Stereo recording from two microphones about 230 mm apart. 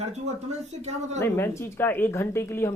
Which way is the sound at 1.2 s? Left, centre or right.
Centre.